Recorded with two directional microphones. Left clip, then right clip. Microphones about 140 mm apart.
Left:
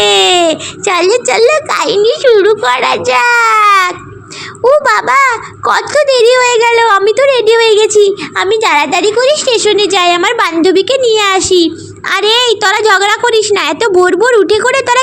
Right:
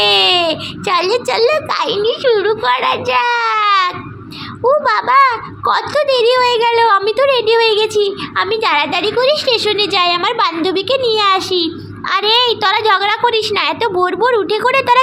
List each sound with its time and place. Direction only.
0.0 s a child's voice: 40° left (ahead or behind)